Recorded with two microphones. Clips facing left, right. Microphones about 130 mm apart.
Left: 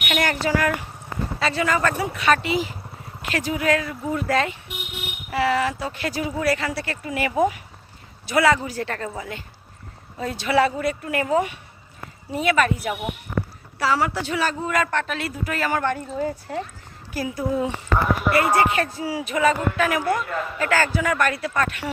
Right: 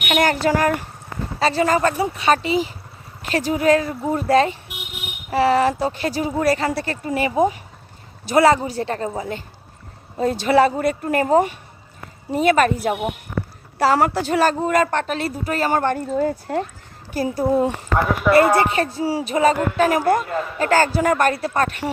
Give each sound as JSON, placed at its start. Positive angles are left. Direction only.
{"t": 0.0, "sound": "speech", "side_deg": -35}
{"t": 17.2, "sound": "speech", "side_deg": -35}